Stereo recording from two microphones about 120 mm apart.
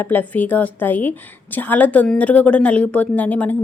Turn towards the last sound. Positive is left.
turn(degrees=10)  # may be behind; listen again after turning